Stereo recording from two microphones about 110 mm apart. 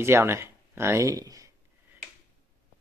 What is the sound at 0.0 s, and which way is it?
Speech, 25° right (ahead or behind).